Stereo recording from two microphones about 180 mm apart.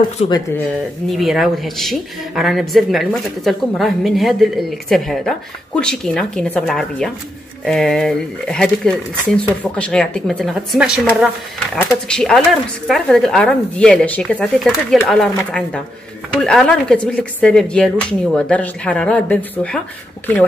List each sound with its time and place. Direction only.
0.2 s speech: 35° left (ahead or behind)
1.0 s speech: centre (ahead or behind)